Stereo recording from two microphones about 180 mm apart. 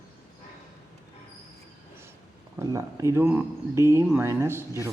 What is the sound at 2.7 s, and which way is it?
Speech, 15° right (ahead or behind).